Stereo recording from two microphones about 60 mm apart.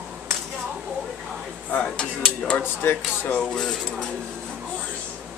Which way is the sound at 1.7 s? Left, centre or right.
Centre.